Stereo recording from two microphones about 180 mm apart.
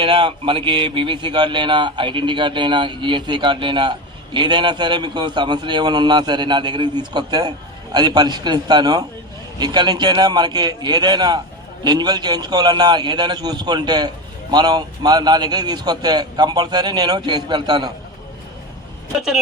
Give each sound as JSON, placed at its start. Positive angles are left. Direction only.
{"t": 0.0, "sound": "speech", "side_deg": -30}